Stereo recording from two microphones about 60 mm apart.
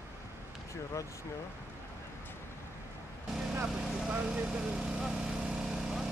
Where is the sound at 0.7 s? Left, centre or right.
Left.